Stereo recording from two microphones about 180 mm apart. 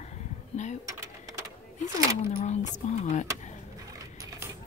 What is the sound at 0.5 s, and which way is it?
Speech, 40° left (ahead or behind).